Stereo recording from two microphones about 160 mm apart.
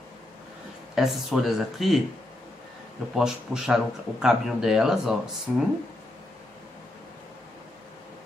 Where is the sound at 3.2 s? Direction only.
5° right (ahead or behind).